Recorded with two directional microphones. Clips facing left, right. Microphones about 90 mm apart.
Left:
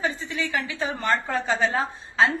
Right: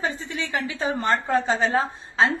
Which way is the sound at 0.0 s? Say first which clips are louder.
Left 1 dB; 35° right (ahead or behind).